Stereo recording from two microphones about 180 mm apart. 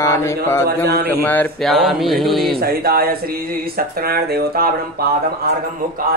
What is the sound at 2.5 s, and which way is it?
Speech, 55° right (ahead or behind).